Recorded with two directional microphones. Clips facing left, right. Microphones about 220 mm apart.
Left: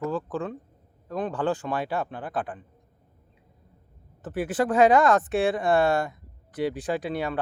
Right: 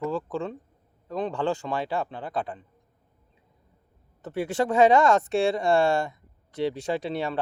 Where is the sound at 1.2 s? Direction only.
25° right (ahead or behind).